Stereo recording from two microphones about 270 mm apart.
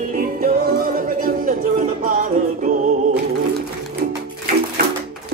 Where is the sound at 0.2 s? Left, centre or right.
Right.